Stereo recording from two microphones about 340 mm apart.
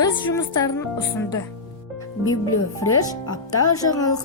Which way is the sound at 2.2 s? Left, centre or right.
Left.